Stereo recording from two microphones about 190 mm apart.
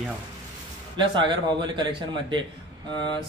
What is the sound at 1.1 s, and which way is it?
A man's voice, 25° right (ahead or behind).